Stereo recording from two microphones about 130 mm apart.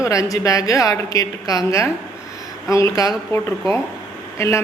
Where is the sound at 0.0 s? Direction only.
25° left (ahead or behind).